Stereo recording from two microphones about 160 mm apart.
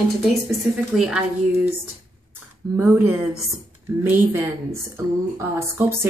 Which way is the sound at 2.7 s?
10° right (ahead or behind).